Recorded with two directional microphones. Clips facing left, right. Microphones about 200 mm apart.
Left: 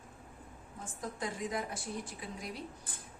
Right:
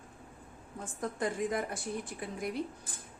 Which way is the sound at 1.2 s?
55° right (ahead or behind).